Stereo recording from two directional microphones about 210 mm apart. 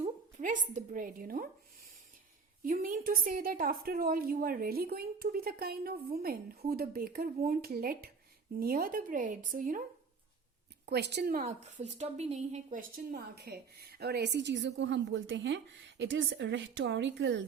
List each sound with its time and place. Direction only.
0.0 s a woman's voice: 35° right (ahead or behind)
2.6 s a woman's voice: 40° right (ahead or behind)
10.8 s a woman's voice: 50° right (ahead or behind)